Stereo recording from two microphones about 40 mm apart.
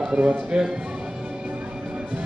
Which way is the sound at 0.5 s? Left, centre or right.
Right.